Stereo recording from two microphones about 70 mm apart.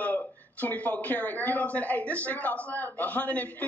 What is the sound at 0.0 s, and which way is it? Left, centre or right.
Speech, left.